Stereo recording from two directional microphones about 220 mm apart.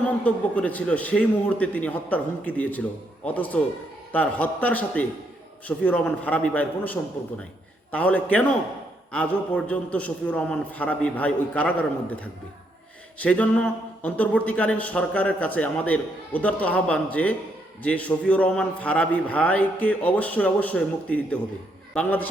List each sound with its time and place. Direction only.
0.0 s speech: 5° left (ahead or behind)